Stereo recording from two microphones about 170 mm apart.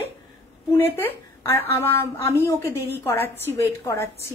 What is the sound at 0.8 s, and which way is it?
A woman's voice, 15° left (ahead or behind).